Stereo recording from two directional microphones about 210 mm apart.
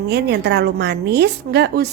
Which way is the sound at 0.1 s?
50° right (ahead or behind).